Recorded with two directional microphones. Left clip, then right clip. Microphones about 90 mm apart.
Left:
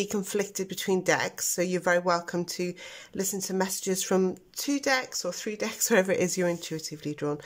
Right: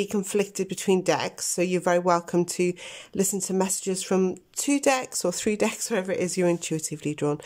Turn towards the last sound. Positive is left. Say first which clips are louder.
# right 4 dB
turn(degrees=-30)  # may be behind; listen again after turning